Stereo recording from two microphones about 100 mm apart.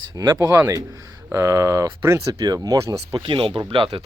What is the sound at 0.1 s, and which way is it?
Speech, 35° right (ahead or behind).